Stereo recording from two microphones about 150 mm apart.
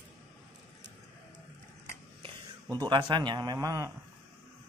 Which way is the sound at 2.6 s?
30° right (ahead or behind).